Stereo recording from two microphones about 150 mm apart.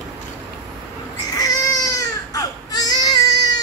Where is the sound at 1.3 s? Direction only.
25° left (ahead or behind).